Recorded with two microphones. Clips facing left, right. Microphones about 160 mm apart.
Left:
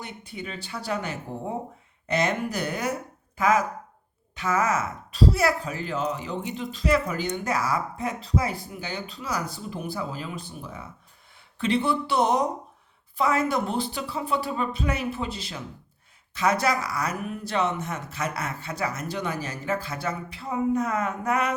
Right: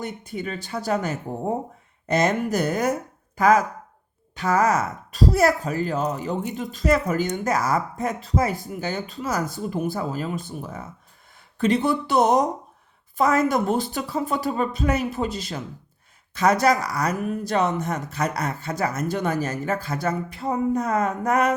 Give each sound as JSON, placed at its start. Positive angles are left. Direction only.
{"t": 0.0, "sound": "speech", "side_deg": -45}